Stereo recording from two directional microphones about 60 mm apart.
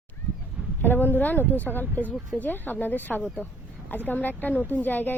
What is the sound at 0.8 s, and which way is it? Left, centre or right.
Speech, left.